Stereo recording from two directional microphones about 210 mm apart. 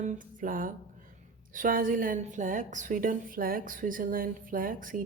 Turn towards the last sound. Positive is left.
turn(degrees=-40)  # may be behind; listen again after turning